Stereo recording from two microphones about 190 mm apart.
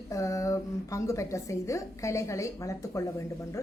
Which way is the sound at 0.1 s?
15° left (ahead or behind).